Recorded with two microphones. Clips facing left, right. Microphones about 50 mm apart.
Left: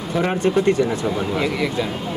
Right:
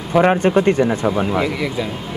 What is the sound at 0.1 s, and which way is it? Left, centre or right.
Speech, right.